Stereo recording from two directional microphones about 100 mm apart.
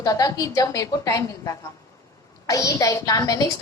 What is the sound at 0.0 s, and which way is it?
A woman's voice, 35° left (ahead or behind).